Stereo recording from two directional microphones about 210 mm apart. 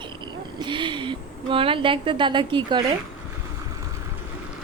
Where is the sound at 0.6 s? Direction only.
20° right (ahead or behind).